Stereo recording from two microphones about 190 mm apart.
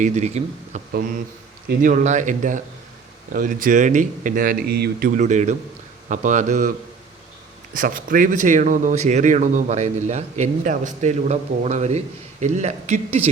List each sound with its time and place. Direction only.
0.0 s a man's voice: 35° right (ahead or behind)
7.8 s a man's voice: 45° right (ahead or behind)